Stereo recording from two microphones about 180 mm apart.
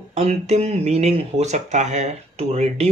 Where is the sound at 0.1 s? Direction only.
35° right (ahead or behind).